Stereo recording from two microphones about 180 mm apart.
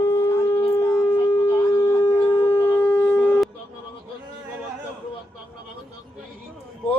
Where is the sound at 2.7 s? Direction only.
10° left (ahead or behind).